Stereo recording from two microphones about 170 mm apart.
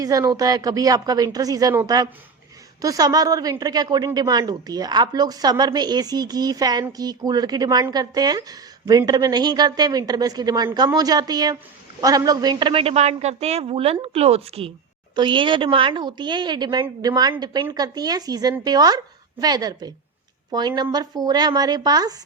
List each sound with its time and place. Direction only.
0.0 s a woman's voice: 20° right (ahead or behind)